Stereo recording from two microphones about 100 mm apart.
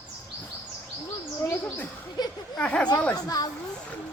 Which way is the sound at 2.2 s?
45° left (ahead or behind).